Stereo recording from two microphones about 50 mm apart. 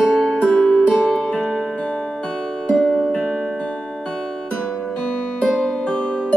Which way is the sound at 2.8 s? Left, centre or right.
Centre.